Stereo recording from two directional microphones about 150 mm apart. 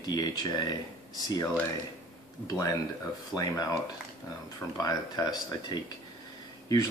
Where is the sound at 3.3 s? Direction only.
25° left (ahead or behind).